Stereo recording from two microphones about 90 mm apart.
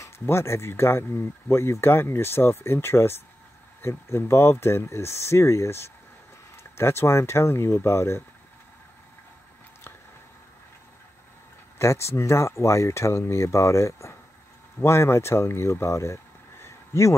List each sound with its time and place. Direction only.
0.0 s speech: 30° left (ahead or behind)
11.8 s speech: 30° left (ahead or behind)